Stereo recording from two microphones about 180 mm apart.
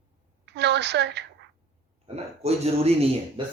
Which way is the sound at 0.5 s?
70° right (ahead or behind).